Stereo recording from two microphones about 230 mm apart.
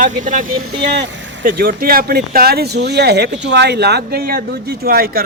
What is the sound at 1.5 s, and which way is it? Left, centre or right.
Speech, right.